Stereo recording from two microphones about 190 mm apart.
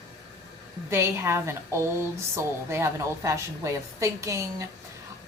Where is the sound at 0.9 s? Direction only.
15° right (ahead or behind).